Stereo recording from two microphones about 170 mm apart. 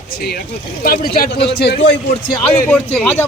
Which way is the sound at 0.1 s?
65° left (ahead or behind).